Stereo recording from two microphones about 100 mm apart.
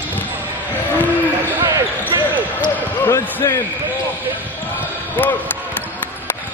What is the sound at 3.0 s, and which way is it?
Speech, 30° left (ahead or behind).